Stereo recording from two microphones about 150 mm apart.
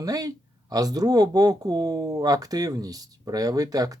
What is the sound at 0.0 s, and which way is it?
Speech, 25° right (ahead or behind).